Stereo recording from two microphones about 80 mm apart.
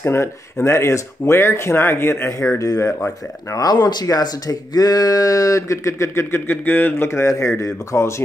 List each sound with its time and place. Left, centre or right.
0.0 s speech: left
2.6 s speech: left